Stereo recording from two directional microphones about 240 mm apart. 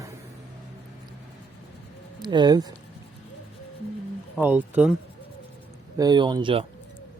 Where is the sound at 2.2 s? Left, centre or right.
Centre.